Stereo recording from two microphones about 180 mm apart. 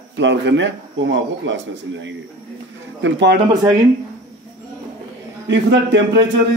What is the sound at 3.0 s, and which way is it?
Speech, 70° right (ahead or behind).